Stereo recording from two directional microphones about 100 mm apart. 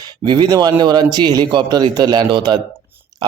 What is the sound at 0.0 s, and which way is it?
A man's voice, 45° right (ahead or behind).